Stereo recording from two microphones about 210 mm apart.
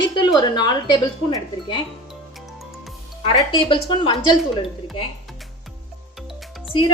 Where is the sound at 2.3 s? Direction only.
Centre (ahead or behind).